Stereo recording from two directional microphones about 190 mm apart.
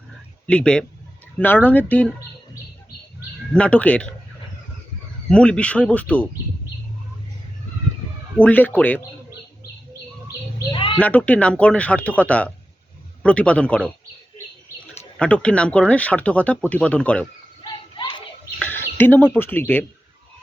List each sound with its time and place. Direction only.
0.4 s speech: 5° left (ahead or behind)
3.5 s speech: 5° left (ahead or behind)
5.3 s speech: 5° left (ahead or behind)
8.4 s speech: 10° left (ahead or behind)
10.7 s bird: 25° left (ahead or behind)
11.0 s speech: 10° left (ahead or behind)
15.2 s speech: 5° left (ahead or behind)
17.6 s children playing: 20° left (ahead or behind)
18.6 s speech: 10° left (ahead or behind)